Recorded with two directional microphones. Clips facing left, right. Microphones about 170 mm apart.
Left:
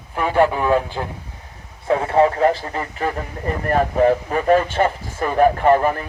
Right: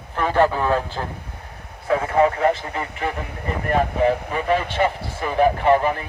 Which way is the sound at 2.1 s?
30° left (ahead or behind).